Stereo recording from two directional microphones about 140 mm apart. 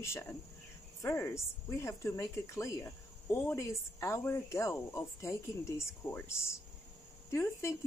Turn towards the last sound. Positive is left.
turn(degrees=20)  # may be behind; listen again after turning